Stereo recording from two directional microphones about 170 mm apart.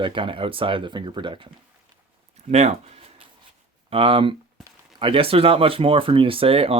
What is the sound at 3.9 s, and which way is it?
Speech, 30° right (ahead or behind).